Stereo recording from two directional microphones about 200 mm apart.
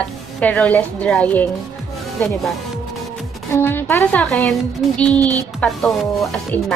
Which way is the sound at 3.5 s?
10° left (ahead or behind).